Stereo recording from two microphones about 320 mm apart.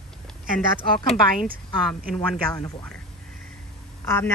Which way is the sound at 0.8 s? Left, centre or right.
Centre.